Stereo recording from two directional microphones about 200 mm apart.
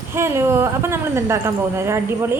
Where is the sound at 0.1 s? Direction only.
10° right (ahead or behind).